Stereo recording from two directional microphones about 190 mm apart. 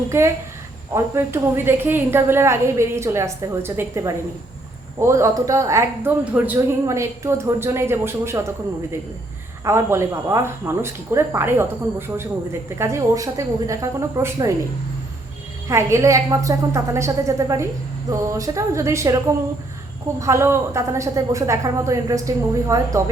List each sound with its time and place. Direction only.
0.1 s speech: 15° right (ahead or behind)
9.6 s speech: 15° right (ahead or behind)
15.7 s speech: 15° right (ahead or behind)